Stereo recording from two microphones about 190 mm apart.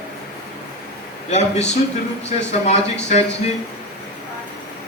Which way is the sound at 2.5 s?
35° left (ahead or behind).